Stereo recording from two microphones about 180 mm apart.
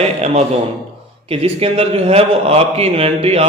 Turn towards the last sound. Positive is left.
turn(degrees=-35)  # may be behind; listen again after turning